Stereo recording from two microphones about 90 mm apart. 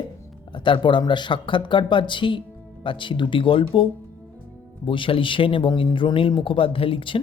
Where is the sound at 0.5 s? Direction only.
60° left (ahead or behind).